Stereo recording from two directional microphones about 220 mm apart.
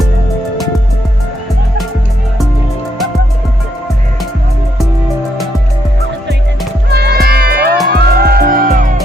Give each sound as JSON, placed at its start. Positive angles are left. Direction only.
{"t": 6.9, "sound": "music", "side_deg": -50}